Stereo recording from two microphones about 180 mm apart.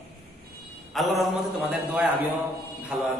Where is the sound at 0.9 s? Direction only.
Centre (ahead or behind).